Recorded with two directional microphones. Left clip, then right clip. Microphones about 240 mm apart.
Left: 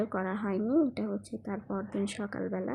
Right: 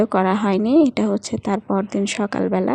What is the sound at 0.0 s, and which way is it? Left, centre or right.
A woman's voice, right.